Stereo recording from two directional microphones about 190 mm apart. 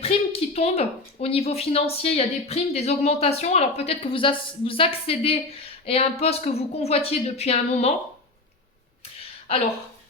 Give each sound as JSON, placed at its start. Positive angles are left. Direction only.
{"t": 0.0, "sound": "a woman's voice", "side_deg": 30}